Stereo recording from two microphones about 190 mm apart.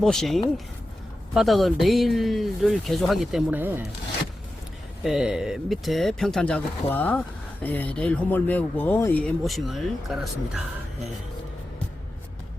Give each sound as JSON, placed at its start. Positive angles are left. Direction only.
{"t": 0.0, "sound": "speech", "side_deg": 0}
{"t": 5.0, "sound": "speech", "side_deg": 0}